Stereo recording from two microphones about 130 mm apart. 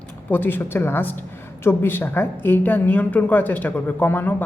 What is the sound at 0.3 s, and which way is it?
A woman's voice, 15° left (ahead or behind).